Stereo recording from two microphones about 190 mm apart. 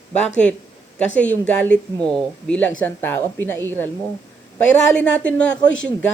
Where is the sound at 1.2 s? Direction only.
5° left (ahead or behind).